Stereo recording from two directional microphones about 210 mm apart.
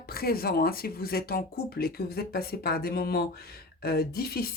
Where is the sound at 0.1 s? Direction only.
45° left (ahead or behind).